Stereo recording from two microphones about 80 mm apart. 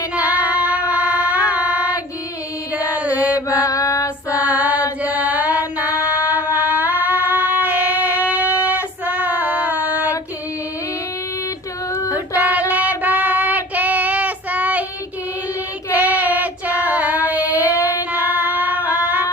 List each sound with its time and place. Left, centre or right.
0.2 s child singing: centre
2.7 s chant: centre
3.3 s female singing: left
4.4 s female singing: centre
12.1 s child singing: right
15.9 s child singing: right
18.9 s singing: centre